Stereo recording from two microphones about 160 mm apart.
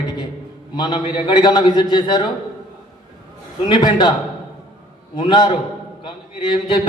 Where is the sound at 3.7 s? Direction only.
30° left (ahead or behind).